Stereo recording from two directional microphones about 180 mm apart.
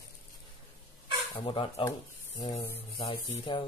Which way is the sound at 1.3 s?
30° left (ahead or behind).